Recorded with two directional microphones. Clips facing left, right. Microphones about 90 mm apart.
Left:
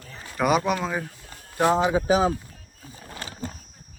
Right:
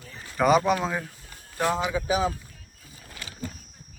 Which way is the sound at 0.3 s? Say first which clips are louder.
Right 2 dB; centre (ahead or behind).